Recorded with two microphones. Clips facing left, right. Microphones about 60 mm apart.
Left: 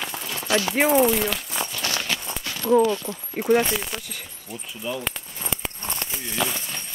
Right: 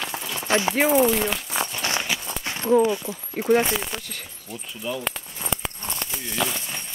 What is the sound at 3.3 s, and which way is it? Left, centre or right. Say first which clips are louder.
Speech: even; centre.